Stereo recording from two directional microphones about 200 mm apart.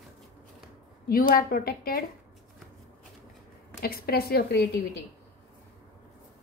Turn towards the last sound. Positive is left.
turn(degrees=55)  # may be behind; listen again after turning